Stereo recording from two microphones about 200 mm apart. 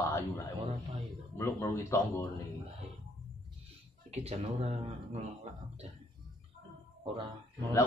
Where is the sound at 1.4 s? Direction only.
15° left (ahead or behind).